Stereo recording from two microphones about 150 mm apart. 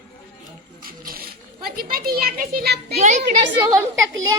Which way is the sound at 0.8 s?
80° right.